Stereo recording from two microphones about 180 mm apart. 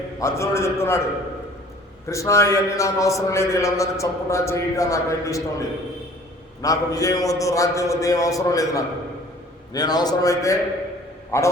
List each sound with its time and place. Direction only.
0.2 s a man's voice: 15° left (ahead or behind)
2.0 s a man's voice: 15° left (ahead or behind)